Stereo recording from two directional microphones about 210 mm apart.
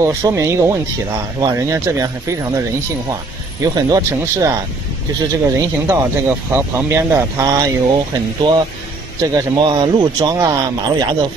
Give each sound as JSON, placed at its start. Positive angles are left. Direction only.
{"t": 0.0, "sound": "speech", "side_deg": -15}
{"t": 3.6, "sound": "speech", "side_deg": -15}